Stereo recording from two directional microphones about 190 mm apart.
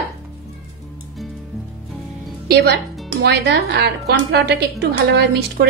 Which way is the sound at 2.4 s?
55° right (ahead or behind).